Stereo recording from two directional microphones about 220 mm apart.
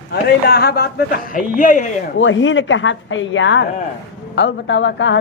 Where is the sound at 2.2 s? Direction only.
60° left (ahead or behind).